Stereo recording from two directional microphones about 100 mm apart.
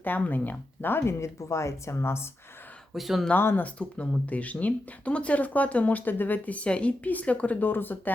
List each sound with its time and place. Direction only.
0.0 s speech: 20° left (ahead or behind)
2.9 s speech: centre (ahead or behind)
3.2 s speech: 20° left (ahead or behind)